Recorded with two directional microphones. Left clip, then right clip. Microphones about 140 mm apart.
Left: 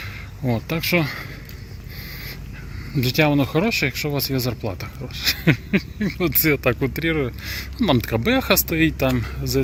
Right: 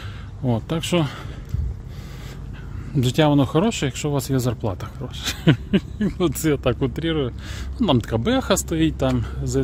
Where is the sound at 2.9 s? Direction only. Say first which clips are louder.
Even; 25° right (ahead or behind).